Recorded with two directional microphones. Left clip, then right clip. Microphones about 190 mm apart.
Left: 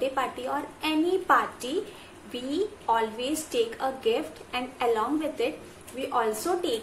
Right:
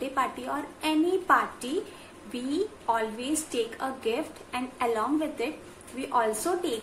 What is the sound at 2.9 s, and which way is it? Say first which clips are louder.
A woman's voice: left 2 dB; 5° right (ahead or behind).